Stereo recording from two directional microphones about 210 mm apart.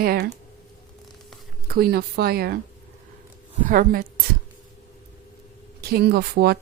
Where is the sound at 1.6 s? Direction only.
45° right (ahead or behind).